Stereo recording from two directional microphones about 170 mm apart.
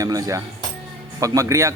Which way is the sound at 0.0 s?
20° right (ahead or behind).